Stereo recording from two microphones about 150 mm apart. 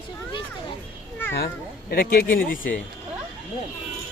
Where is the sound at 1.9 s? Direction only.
85° left.